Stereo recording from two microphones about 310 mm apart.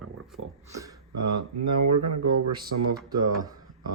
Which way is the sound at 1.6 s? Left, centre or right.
Right.